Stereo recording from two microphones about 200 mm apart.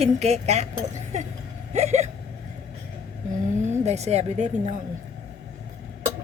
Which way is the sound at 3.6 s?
35° right (ahead or behind).